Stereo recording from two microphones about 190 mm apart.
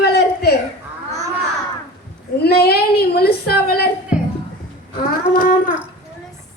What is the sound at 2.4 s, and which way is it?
A woman's voice, 55° left (ahead or behind).